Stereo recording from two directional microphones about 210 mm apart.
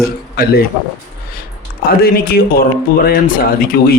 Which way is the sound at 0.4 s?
45° left (ahead or behind).